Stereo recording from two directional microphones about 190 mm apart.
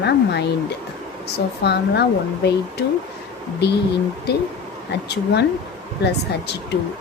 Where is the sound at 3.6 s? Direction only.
60° left (ahead or behind).